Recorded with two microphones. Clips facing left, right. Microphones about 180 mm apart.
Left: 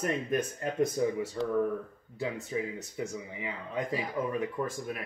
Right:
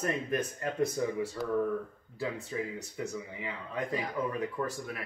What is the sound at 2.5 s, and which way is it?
Speech, 20° left (ahead or behind).